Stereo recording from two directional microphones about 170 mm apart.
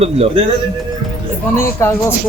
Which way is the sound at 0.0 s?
35° right (ahead or behind).